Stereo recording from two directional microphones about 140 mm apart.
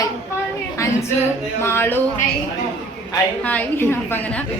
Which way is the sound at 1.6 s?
15° left (ahead or behind).